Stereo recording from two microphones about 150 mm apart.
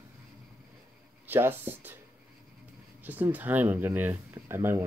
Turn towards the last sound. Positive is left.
turn(degrees=-15)  # may be behind; listen again after turning